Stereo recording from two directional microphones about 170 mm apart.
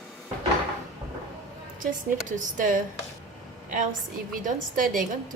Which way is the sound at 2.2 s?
50° right (ahead or behind).